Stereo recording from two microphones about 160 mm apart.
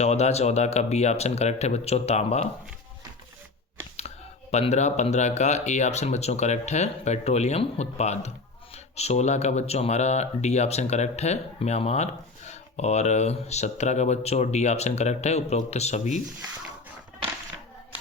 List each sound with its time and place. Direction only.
0.0 s speech: 40° left (ahead or behind)
4.5 s speech: 45° left (ahead or behind)